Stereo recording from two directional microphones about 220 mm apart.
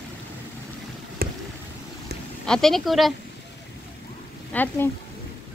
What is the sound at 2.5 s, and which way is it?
Speech, centre (ahead or behind).